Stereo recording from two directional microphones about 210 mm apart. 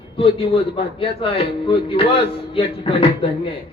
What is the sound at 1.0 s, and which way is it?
Music, 25° left (ahead or behind).